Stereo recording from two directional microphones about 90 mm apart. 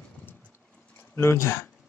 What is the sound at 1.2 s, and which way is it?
Speech, 30° left (ahead or behind).